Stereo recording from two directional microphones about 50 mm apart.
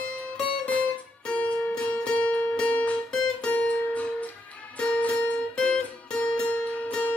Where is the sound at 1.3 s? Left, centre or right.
Left.